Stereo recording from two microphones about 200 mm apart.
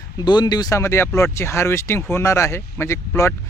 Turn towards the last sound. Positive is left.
turn(degrees=15)  # may be behind; listen again after turning